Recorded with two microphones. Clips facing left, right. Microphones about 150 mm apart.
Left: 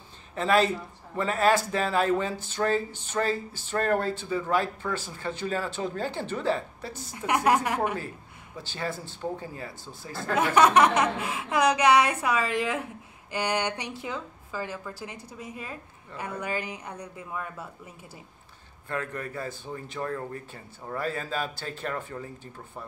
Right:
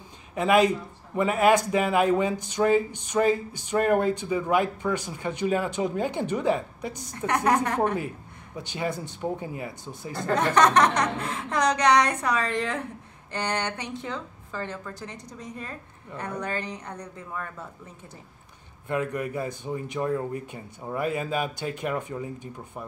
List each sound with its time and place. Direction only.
0.3 s speech: 10° right (ahead or behind)
7.1 s a woman's voice: 5° left (ahead or behind)
8.5 s speech: 20° right (ahead or behind)
10.2 s a woman's voice: 5° left (ahead or behind)
18.9 s speech: 15° right (ahead or behind)